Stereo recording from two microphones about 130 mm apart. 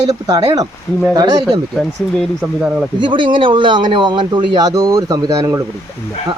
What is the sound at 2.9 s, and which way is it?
Speech, 40° right (ahead or behind).